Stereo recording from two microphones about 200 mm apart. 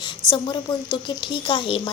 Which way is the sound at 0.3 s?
25° left (ahead or behind).